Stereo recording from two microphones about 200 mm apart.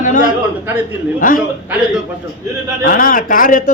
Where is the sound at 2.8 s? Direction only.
45° left (ahead or behind).